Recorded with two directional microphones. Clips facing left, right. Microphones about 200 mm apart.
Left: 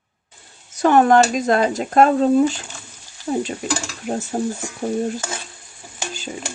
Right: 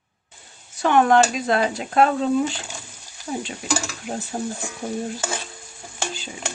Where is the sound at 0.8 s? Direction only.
40° left (ahead or behind).